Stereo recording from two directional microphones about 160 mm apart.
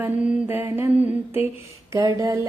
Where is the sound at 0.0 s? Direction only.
10° right (ahead or behind).